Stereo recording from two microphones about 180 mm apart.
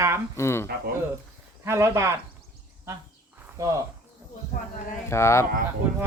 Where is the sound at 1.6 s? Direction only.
15° right (ahead or behind).